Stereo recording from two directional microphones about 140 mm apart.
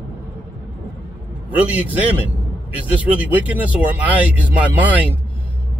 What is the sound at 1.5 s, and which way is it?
Speech, 10° right (ahead or behind).